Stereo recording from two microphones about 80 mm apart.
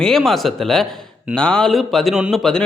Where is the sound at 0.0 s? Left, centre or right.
Centre.